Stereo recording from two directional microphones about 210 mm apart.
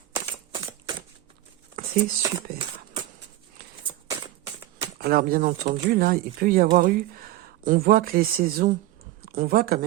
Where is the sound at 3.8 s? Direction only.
20° right (ahead or behind).